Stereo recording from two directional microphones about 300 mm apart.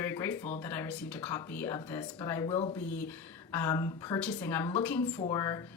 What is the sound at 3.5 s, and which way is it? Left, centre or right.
A woman's voice, centre.